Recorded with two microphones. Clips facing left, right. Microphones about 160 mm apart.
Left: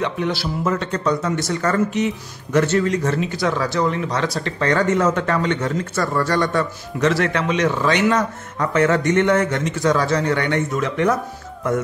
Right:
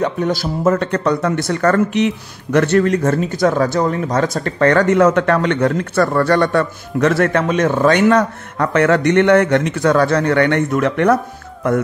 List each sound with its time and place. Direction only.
0.0 s speech: 45° right (ahead or behind); by 11.1 s 65° right (ahead or behind)